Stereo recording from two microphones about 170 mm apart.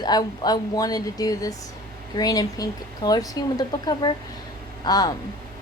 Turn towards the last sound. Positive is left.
turn(degrees=25)  # may be behind; listen again after turning